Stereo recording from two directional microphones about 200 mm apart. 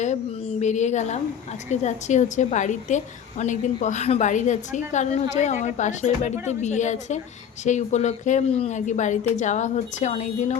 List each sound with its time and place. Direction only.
0.6 s a woman's voice: 35° left (ahead or behind)